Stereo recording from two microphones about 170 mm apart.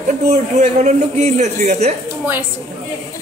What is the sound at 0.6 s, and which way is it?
A man's voice, 40° right (ahead or behind).